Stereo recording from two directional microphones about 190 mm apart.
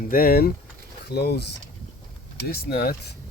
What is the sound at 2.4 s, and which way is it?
Speech, 55° left (ahead or behind).